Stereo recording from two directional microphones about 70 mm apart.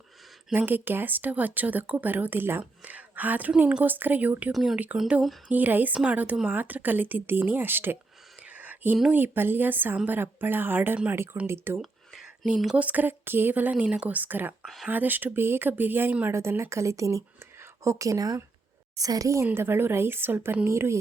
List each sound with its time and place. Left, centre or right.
0.5 s speech: right
4.5 s speech: centre
5.5 s speech: right
8.4 s a sound: right
9.1 s a woman's voice: right
11.8 s whispering: centre
12.7 s speech: right
16.3 s a woman's voice: right
19.5 s a woman's voice: right